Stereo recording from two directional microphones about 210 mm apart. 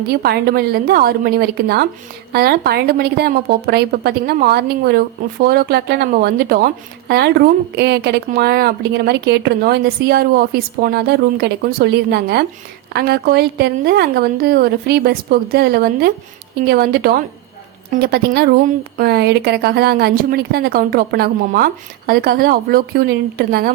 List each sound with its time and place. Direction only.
0.1 s speech: 50° right (ahead or behind)